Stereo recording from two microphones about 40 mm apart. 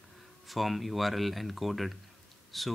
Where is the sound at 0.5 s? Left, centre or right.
Centre.